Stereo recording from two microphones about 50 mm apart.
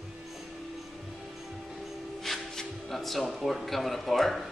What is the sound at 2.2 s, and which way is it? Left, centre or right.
Speech, centre.